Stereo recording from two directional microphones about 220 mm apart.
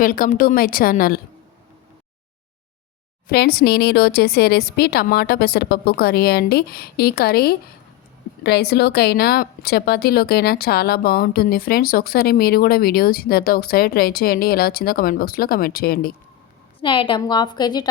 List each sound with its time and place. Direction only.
0.0 s a woman's voice: 40° left (ahead or behind)
3.2 s speech: 45° left (ahead or behind)
16.8 s a woman's voice: 20° left (ahead or behind)